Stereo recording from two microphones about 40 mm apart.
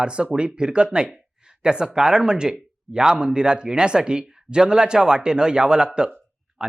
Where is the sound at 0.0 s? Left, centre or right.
Right.